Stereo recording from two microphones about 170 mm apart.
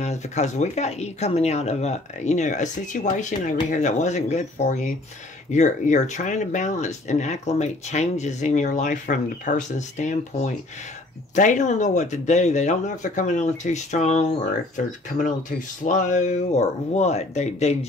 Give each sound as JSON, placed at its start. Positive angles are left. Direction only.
{"t": 0.0, "sound": "speech", "side_deg": 40}
{"t": 15.8, "sound": "speech", "side_deg": 45}